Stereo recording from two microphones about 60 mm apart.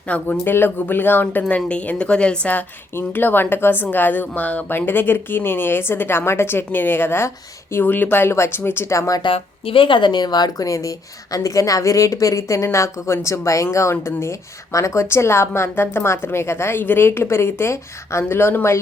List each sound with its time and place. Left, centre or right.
0.1 s speech: left
0.4 s speech: left
2.9 s a woman's voice: left
7.9 s speech: left
8.9 s a woman's voice: left
10.4 s a woman's voice: left
15.1 s a woman's voice: left